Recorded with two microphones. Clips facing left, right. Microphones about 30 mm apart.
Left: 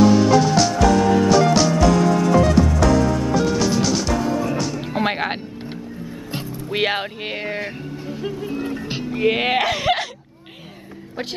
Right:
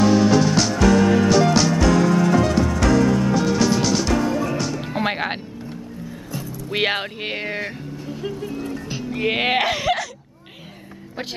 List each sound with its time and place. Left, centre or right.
0.0 s music: centre
6.7 s music: centre
8.1 s music: centre
8.5 s music: left
9.1 s music: centre